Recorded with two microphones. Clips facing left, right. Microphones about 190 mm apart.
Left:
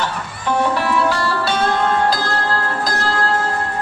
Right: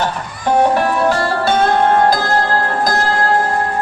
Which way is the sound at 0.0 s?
45° right (ahead or behind).